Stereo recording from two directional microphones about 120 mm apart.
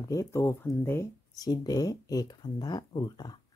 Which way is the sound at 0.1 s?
25° left (ahead or behind).